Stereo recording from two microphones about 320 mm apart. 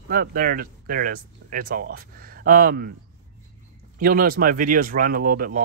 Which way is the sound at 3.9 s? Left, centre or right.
Right.